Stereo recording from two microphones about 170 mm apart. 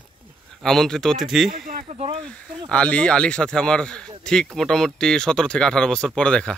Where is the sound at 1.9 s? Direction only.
35° right (ahead or behind).